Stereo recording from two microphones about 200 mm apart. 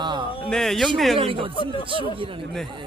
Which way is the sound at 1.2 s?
25° right (ahead or behind).